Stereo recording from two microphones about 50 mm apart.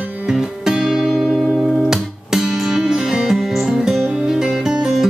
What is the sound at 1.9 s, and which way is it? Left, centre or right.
Music, centre.